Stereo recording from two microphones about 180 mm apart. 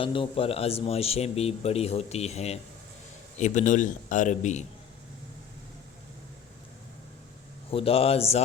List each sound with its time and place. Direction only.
0.0 s a man's voice: 30° left (ahead or behind)
7.7 s speech: 30° left (ahead or behind)